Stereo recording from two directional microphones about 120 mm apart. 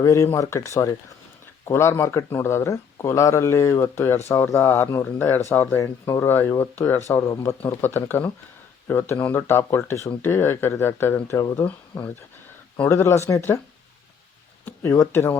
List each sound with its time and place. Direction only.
0.0 s speech: 25° left (ahead or behind)
11.6 s speech: 15° left (ahead or behind)
14.6 s speech: 25° left (ahead or behind)